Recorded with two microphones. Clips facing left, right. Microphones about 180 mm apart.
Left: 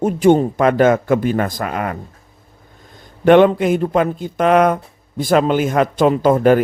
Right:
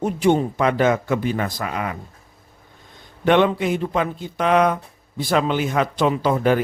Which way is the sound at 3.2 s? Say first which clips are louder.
Left 7 dB; 50° left (ahead or behind).